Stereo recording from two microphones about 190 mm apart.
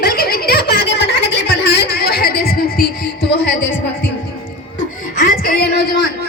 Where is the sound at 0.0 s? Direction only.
55° left (ahead or behind).